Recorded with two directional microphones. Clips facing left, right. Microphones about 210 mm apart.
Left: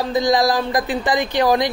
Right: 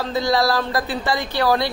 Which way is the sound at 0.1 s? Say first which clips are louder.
Left 2 dB; 15° left (ahead or behind).